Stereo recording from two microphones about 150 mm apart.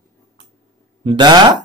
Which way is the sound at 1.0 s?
30° right (ahead or behind).